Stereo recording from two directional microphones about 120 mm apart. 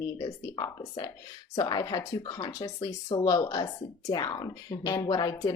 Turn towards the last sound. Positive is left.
turn(degrees=30)  # may be behind; listen again after turning